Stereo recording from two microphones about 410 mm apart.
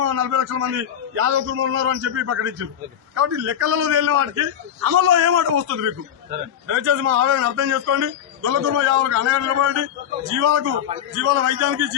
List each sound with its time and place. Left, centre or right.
0.0 s a man's voice: right